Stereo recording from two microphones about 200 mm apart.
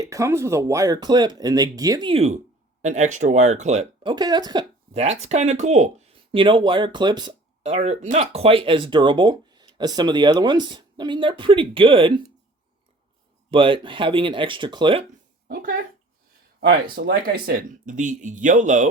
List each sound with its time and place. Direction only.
0.0 s speech: 15° right (ahead or behind)
4.9 s speech: 35° right (ahead or behind)
6.3 s speech: 25° right (ahead or behind)
7.6 s speech: 30° right (ahead or behind)
13.5 s speech: 25° right (ahead or behind)
15.4 s speech: 45° right (ahead or behind)